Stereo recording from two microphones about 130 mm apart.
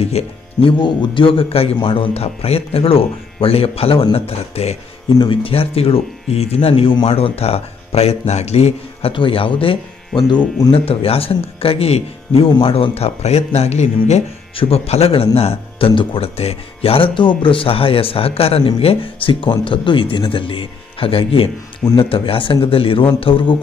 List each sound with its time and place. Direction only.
0.0 s speech: 45° left (ahead or behind)
9.1 s speech: 40° left (ahead or behind)